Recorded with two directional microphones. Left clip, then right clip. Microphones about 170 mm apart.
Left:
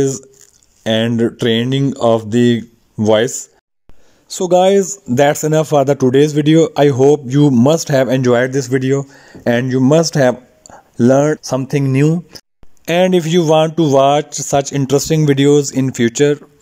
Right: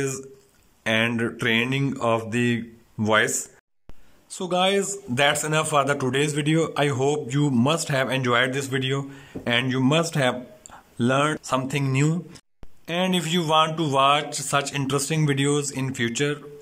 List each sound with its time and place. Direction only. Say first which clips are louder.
0.8 s speech: left 7 dB; 35° left (ahead or behind)
1.8 s speech: left 10 dB; 20° left (ahead or behind)
4.3 s speech: left 11 dB; 45° left (ahead or behind)
12.8 s speech: left 12 dB; 50° left (ahead or behind)